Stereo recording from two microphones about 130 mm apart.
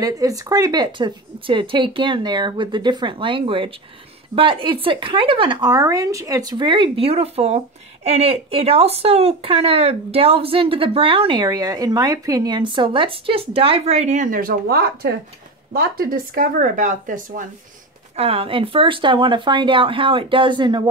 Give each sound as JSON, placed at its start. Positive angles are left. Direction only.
{"t": 0.0, "sound": "speech", "side_deg": -25}
{"t": 16.1, "sound": "speech", "side_deg": -90}
{"t": 18.1, "sound": "speech", "side_deg": -50}